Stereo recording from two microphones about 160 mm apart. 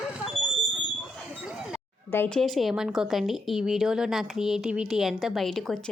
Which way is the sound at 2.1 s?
10° left (ahead or behind).